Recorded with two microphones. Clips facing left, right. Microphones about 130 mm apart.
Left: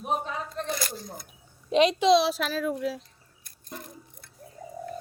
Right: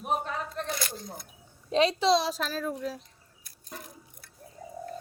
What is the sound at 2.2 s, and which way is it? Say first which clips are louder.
Child singing: left 5 dB; 85° left.